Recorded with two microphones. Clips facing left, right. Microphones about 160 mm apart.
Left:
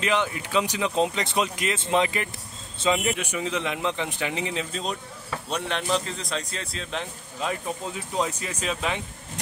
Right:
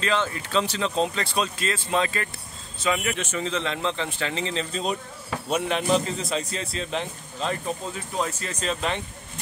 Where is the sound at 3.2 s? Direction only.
10° left (ahead or behind).